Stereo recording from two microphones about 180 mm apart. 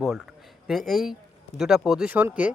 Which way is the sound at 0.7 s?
Centre (ahead or behind).